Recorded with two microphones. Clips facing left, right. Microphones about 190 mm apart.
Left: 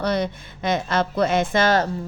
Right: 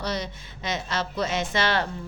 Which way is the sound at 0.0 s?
55° left (ahead or behind).